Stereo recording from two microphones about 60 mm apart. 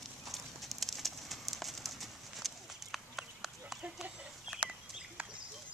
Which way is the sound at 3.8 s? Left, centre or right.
Centre.